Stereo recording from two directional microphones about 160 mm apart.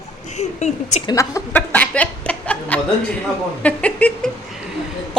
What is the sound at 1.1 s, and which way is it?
Chuckle, 20° left (ahead or behind).